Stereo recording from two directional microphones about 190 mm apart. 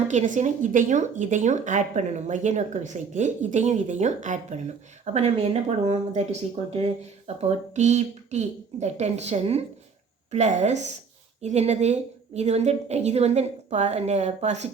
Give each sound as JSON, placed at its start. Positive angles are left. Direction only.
{"t": 0.1, "sound": "speech", "side_deg": -40}
{"t": 7.4, "sound": "speech", "side_deg": -35}